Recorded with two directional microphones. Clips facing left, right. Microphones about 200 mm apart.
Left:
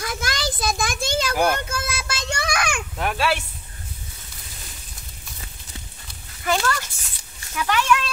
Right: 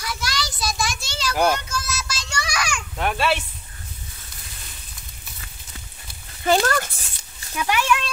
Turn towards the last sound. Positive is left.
turn(degrees=-15)  # may be behind; listen again after turning